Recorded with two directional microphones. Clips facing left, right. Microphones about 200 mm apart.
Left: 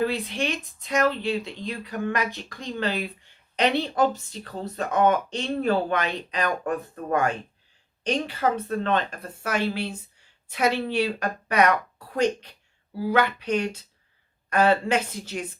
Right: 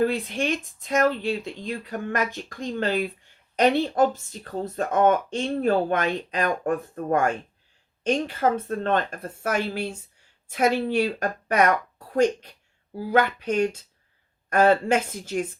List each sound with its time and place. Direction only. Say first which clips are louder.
0.0 s speech: right 2 dB; 45° right (ahead or behind)